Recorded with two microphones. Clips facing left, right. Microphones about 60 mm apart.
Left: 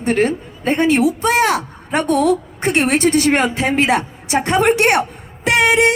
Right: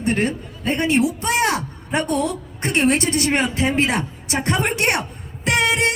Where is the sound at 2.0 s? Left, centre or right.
Left.